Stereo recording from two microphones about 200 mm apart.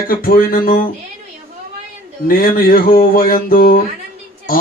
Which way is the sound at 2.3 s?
45° left (ahead or behind).